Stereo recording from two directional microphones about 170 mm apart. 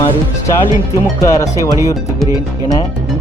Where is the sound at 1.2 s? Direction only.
20° left (ahead or behind).